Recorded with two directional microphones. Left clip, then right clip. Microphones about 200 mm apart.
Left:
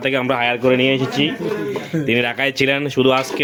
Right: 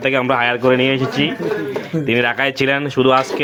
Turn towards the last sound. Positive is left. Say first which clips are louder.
# right 2 dB
turn(degrees=15)  # may be behind; listen again after turning